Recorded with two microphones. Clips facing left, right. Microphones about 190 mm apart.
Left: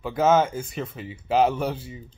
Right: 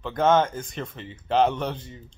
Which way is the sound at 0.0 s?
5° left (ahead or behind).